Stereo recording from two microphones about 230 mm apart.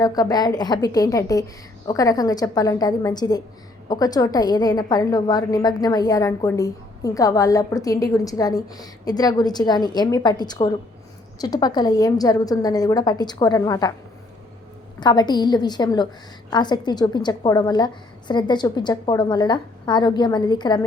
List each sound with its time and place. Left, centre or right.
0.0 s a woman's voice: centre
15.0 s a woman's voice: centre